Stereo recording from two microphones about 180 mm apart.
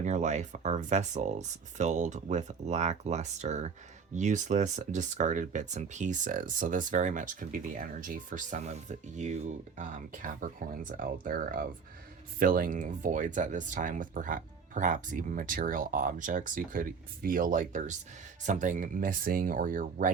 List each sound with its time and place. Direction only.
0.0 s speech: 40° right (ahead or behind)